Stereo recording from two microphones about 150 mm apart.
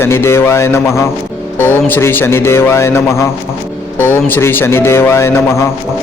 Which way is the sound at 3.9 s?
15° left (ahead or behind).